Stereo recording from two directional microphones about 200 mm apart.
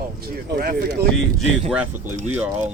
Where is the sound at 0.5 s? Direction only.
45° right (ahead or behind).